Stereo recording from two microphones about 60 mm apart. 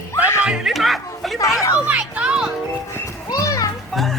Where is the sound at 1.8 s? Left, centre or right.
Right.